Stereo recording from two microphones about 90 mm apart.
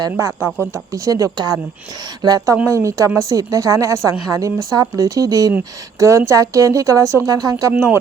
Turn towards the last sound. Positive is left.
turn(degrees=-30)  # may be behind; listen again after turning